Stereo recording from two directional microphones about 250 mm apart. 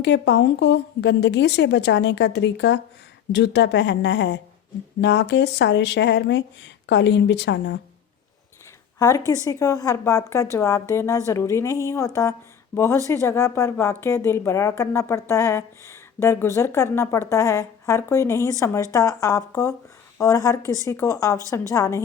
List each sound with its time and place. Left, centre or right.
0.0 s speech: left
9.0 s a woman's voice: centre